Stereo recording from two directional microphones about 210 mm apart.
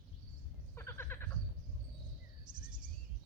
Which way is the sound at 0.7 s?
10° left (ahead or behind).